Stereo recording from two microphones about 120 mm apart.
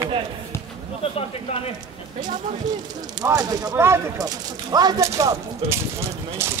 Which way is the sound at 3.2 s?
30° right (ahead or behind).